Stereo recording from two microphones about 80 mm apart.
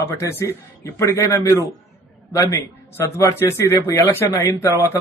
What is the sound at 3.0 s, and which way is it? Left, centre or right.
Speech, left.